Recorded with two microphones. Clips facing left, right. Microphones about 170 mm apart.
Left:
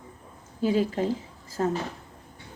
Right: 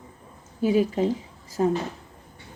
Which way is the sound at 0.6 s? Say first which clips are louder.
Right 3 dB; 15° right (ahead or behind).